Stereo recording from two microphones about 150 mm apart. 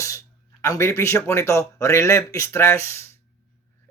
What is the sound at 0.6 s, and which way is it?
A man's voice, 20° left (ahead or behind).